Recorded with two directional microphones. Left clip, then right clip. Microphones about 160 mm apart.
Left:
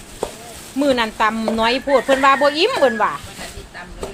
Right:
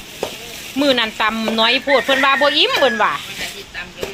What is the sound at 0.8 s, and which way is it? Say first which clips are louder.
A man's voice: right 1 dB; 5° left (ahead or behind).